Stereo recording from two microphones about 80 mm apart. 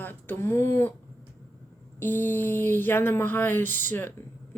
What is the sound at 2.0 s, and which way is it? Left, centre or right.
A woman's voice, left.